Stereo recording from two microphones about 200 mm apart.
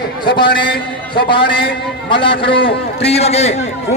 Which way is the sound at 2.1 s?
60° left (ahead or behind).